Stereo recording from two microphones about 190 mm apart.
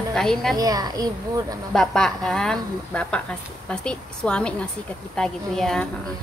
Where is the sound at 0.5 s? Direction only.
20° right (ahead or behind).